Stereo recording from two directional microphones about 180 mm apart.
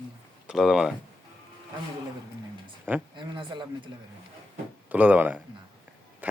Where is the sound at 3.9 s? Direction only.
25° right (ahead or behind).